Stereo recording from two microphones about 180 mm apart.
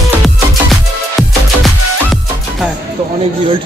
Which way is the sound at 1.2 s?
Centre (ahead or behind).